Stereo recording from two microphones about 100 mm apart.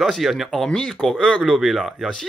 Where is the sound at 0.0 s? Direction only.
Centre (ahead or behind).